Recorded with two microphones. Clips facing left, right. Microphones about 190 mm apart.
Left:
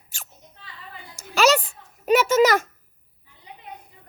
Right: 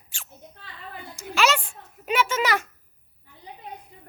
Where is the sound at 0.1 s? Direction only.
45° left (ahead or behind).